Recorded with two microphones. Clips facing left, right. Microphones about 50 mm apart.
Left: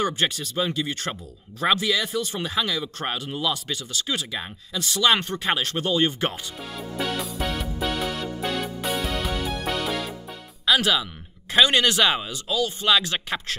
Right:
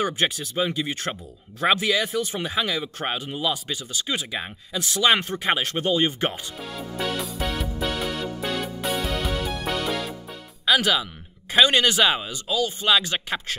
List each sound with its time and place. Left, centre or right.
0.0 s speech: centre
6.6 s music: centre
10.6 s music: centre
11.7 s speech: centre